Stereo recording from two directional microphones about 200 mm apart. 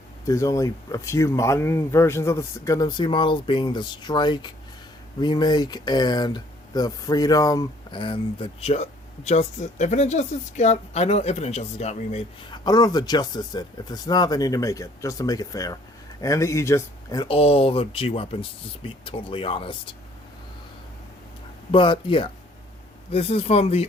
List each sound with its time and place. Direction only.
0.3 s speech: 15° left (ahead or behind); by 12.5 s 30° left (ahead or behind)
12.6 s speech: 20° left (ahead or behind)
17.3 s speech: 30° left (ahead or behind)
21.7 s speech: 25° left (ahead or behind)